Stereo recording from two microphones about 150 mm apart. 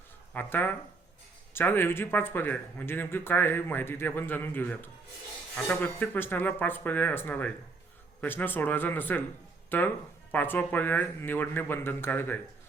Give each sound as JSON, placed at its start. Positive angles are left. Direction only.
{"t": 0.3, "sound": "speech", "side_deg": 10}